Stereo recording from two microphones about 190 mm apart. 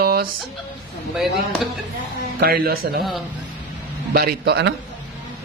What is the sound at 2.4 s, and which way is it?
Speech, 50° right (ahead or behind).